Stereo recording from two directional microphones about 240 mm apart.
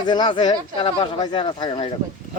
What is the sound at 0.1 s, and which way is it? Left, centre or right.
Speech, centre.